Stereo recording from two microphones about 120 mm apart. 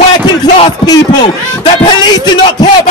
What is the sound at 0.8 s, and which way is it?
A man's voice, 35° left (ahead or behind).